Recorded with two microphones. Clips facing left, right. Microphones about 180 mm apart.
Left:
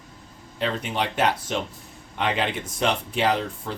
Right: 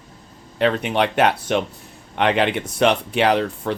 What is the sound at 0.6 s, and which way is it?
Speech, 65° right (ahead or behind).